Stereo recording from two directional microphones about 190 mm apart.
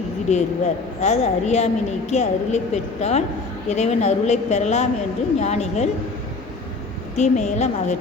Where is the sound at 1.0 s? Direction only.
35° left (ahead or behind).